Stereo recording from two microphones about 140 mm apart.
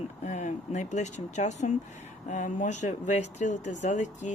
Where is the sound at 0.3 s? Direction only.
55° left (ahead or behind).